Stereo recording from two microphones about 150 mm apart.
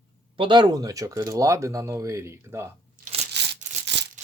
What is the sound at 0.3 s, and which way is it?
Speech, 30° right (ahead or behind).